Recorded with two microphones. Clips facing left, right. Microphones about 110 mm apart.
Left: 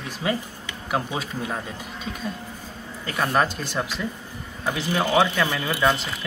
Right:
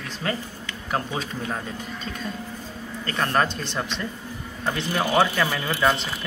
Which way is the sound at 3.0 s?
5° left (ahead or behind).